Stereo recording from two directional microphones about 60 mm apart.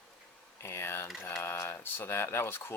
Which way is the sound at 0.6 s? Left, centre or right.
Left.